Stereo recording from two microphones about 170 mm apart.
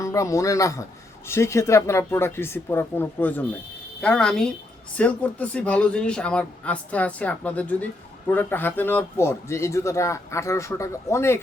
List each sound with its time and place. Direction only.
0.0 s a woman's voice: 20° left (ahead or behind)